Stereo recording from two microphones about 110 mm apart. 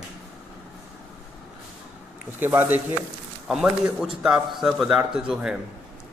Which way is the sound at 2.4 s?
20° right (ahead or behind).